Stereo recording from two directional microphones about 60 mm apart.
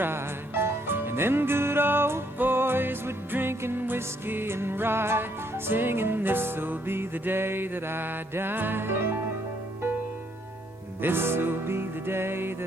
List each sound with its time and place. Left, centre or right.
0.0 s music: right
11.0 s music: right